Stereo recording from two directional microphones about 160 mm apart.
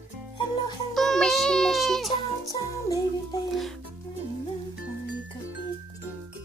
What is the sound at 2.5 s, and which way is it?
Music, 20° left (ahead or behind).